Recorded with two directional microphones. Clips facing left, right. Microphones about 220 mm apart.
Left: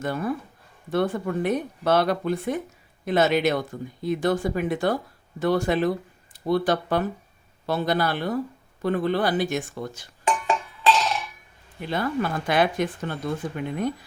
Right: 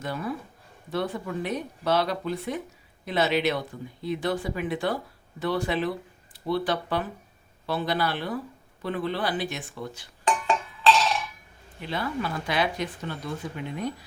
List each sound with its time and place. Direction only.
0.0 s speech: 50° left (ahead or behind)
11.8 s speech: 50° left (ahead or behind)